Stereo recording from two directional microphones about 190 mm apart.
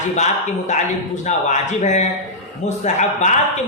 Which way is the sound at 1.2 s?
40° left (ahead or behind).